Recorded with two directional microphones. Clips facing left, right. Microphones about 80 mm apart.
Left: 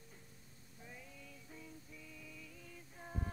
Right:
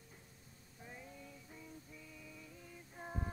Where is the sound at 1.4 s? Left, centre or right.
Centre.